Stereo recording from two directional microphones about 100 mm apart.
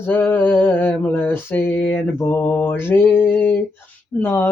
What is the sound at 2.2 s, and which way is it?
Mantra, 25° left (ahead or behind).